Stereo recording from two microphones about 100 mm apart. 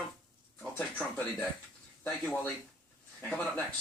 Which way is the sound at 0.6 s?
5° left (ahead or behind).